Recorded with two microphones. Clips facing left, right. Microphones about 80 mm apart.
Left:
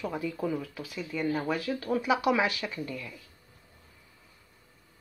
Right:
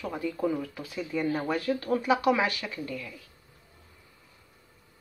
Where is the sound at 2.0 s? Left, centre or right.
Centre.